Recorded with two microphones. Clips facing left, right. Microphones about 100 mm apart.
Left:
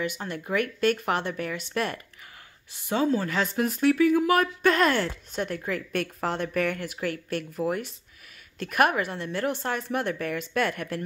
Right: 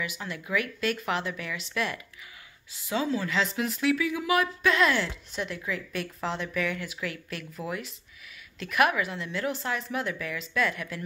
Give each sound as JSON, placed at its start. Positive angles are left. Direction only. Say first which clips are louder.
{"t": 0.2, "sound": "speech", "louder": "left 3 dB", "side_deg": 45}
{"t": 8.5, "sound": "speech", "louder": "left 2 dB", "side_deg": 45}